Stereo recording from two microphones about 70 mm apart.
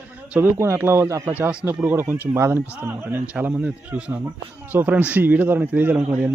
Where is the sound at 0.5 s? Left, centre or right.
Right.